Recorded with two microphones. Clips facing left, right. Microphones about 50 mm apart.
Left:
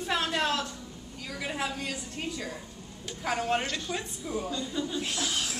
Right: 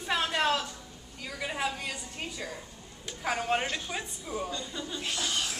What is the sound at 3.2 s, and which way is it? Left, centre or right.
Speech, centre.